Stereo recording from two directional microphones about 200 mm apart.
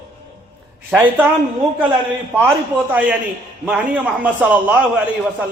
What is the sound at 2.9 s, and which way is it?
A man's voice, 5° right (ahead or behind).